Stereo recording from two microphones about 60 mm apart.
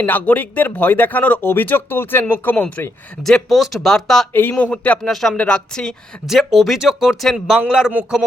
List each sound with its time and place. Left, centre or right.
0.0 s a man's voice: left
3.2 s speech: centre
4.3 s speech: left
4.5 s a man's voice: left
5.0 s speech: centre
6.4 s speech: centre
7.3 s a man's voice: centre